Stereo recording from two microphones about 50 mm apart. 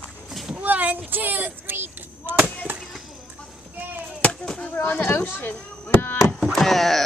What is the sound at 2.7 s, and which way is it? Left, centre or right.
Chop, right.